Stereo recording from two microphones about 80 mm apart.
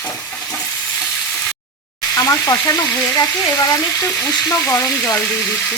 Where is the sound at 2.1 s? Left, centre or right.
Left.